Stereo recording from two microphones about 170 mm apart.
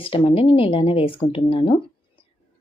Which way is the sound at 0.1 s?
35° left (ahead or behind).